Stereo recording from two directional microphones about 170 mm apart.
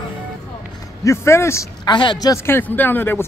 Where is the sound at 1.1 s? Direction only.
15° left (ahead or behind).